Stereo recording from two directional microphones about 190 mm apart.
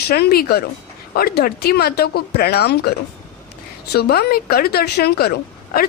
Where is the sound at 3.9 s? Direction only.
55° left (ahead or behind).